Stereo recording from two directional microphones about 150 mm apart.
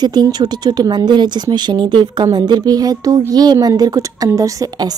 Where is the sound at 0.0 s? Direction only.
25° right (ahead or behind).